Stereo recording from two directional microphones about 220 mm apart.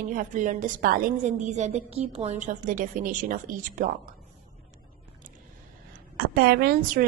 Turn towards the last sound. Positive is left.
turn(degrees=-45)  # may be behind; listen again after turning